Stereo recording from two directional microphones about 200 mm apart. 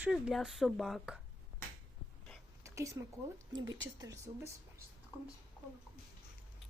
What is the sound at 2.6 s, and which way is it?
Speech, 15° right (ahead or behind).